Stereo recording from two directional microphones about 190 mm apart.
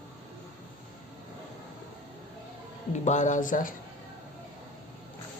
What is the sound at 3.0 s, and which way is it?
Speech, 40° left (ahead or behind).